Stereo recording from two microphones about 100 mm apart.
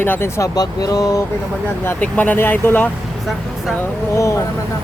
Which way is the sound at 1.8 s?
20° left (ahead or behind).